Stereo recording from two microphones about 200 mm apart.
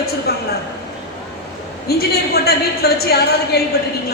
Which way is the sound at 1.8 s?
50° left (ahead or behind).